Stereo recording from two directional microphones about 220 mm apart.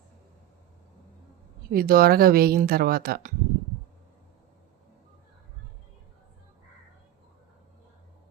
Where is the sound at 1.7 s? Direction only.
40° right (ahead or behind).